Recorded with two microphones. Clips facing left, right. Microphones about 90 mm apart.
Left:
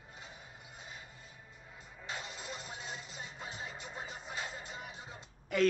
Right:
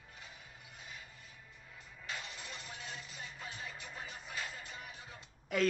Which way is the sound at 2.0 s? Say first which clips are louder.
Left 2 dB; 25° left (ahead or behind).